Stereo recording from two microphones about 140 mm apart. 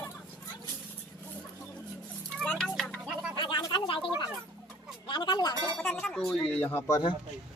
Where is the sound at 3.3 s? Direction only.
35° left (ahead or behind).